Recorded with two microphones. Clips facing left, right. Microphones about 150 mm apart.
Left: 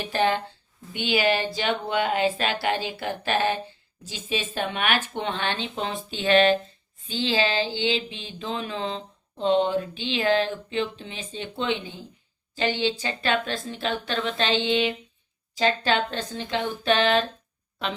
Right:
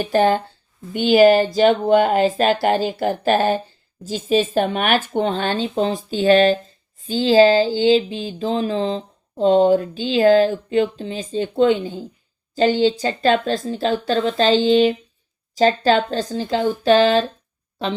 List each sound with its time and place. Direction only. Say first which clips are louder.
0.0 s speech: right 7 dB; 45° right (ahead or behind)